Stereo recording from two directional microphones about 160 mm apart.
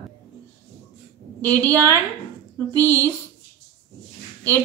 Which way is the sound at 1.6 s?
20° right (ahead or behind).